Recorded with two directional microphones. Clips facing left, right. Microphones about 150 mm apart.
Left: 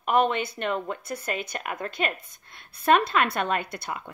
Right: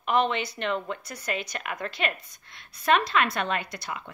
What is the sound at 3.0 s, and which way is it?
Speech, 50° left (ahead or behind).